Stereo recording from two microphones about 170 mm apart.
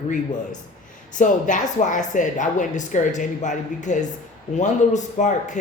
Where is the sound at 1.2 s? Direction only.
50° left (ahead or behind).